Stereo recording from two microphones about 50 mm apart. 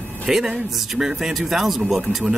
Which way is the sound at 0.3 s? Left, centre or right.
Centre.